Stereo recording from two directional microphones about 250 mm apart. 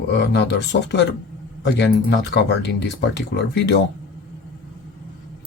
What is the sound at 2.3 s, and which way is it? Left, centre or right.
Speech, left.